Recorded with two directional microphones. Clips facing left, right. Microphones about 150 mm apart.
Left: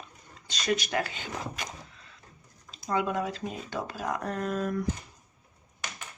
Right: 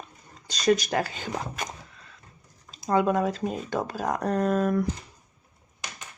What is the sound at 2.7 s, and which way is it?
Speech, 45° right (ahead or behind).